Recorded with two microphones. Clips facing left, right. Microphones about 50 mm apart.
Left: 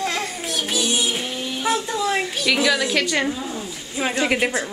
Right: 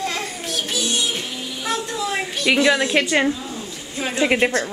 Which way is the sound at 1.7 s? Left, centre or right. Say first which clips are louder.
Left 2 dB; centre.